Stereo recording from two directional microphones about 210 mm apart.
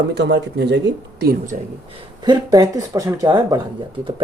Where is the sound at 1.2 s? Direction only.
40° right (ahead or behind).